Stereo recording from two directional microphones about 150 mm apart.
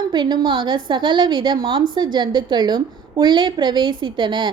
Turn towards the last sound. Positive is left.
turn(degrees=-30)  # may be behind; listen again after turning